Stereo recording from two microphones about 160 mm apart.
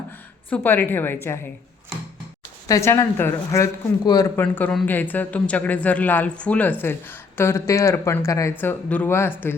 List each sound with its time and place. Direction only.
0.5 s speech: 10° left (ahead or behind)
2.6 s speech: 20° left (ahead or behind)
4.4 s speech: 10° left (ahead or behind)